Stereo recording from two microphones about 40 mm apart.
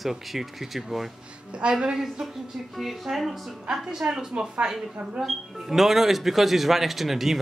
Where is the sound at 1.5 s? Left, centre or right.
Right.